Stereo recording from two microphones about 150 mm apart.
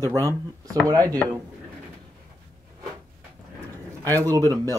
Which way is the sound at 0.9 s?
25° right (ahead or behind).